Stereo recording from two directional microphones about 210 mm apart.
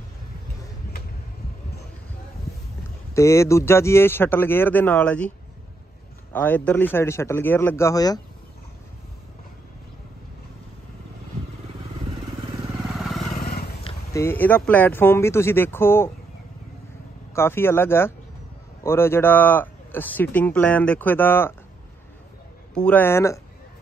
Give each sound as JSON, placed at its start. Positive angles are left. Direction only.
{"t": 3.2, "sound": "speech", "side_deg": 15}
{"t": 6.3, "sound": "speech", "side_deg": 10}
{"t": 13.0, "sound": "vehicle", "side_deg": 0}
{"t": 13.3, "sound": "roaring cats", "side_deg": 45}
{"t": 14.1, "sound": "speech", "side_deg": 10}
{"t": 17.3, "sound": "speech", "side_deg": 10}
{"t": 22.8, "sound": "speech", "side_deg": 10}